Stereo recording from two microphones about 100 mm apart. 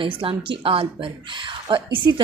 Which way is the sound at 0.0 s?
60° right (ahead or behind).